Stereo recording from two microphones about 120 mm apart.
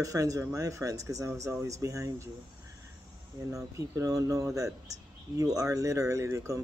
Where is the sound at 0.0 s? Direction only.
30° right (ahead or behind).